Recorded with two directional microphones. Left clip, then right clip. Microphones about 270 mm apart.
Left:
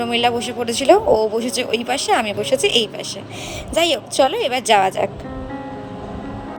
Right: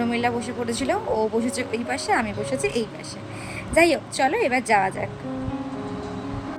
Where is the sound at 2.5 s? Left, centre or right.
Left.